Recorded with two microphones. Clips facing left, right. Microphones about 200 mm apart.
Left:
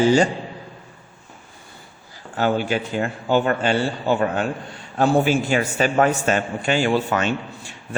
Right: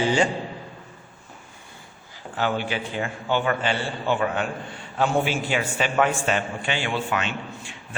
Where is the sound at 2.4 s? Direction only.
45° left (ahead or behind).